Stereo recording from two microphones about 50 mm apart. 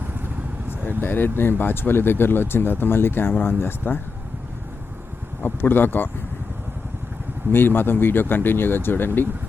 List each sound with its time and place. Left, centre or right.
1.0 s speech: left
5.4 s speech: left
7.5 s speech: left